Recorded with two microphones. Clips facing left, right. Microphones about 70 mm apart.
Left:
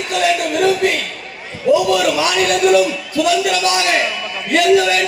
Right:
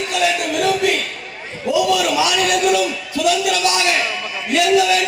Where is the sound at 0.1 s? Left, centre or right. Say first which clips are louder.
Left 4 dB; left.